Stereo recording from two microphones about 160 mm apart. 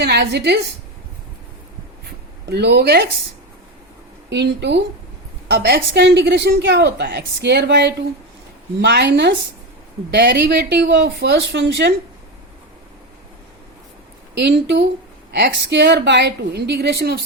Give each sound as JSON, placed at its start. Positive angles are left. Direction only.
{"t": 0.0, "sound": "a woman's voice", "side_deg": -90}
{"t": 2.0, "sound": "a sound", "side_deg": -90}
{"t": 4.3, "sound": "a woman's voice", "side_deg": -90}
{"t": 14.3, "sound": "a woman's voice", "side_deg": -90}